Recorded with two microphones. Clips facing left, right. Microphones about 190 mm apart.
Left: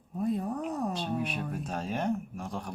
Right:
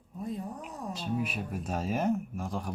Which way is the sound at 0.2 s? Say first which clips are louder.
Left 6 dB; 65° left (ahead or behind).